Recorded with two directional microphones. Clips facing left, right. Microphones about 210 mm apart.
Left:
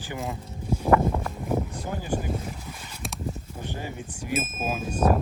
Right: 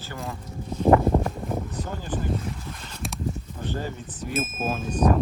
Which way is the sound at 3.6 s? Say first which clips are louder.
Right 4 dB; 15° left (ahead or behind).